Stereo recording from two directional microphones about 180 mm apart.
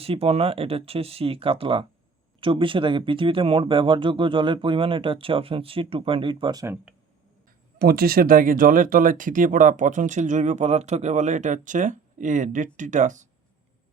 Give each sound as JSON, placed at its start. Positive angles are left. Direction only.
{"t": 0.0, "sound": "speech", "side_deg": -35}
{"t": 7.8, "sound": "speech", "side_deg": -60}